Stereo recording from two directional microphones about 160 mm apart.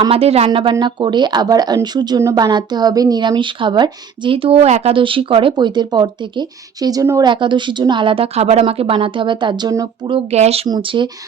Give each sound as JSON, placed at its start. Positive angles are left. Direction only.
{"t": 0.1, "sound": "a woman's voice", "side_deg": -40}
{"t": 10.3, "sound": "speech", "side_deg": -45}
{"t": 10.7, "sound": "speech", "side_deg": -30}